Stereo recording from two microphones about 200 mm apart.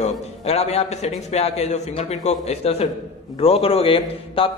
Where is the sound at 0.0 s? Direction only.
30° left (ahead or behind).